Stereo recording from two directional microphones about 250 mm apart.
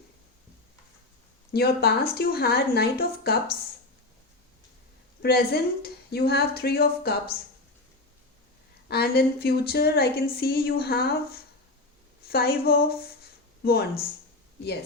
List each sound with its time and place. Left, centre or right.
1.5 s a woman's voice: left
5.2 s a woman's voice: left
8.9 s a woman's voice: left